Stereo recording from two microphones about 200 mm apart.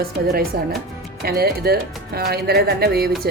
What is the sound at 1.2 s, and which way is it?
Speech, 50° right (ahead or behind).